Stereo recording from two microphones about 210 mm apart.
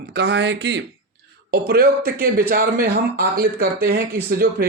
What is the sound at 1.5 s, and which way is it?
Speech, 45° right (ahead or behind).